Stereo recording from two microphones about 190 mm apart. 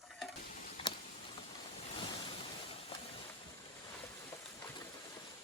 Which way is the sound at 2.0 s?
25° left (ahead or behind).